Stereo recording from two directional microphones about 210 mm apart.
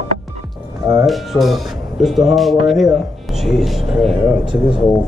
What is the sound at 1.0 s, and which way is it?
Music, centre (ahead or behind).